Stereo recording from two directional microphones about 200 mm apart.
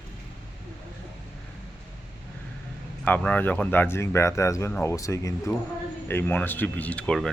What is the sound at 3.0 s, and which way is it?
Speech, 10° left (ahead or behind).